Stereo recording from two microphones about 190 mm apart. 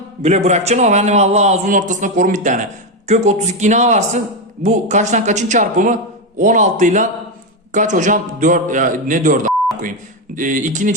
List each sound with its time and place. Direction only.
0.2 s a man's voice: 35° right (ahead or behind)